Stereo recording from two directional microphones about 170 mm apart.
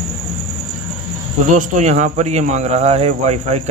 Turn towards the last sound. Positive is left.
turn(degrees=-40)  # may be behind; listen again after turning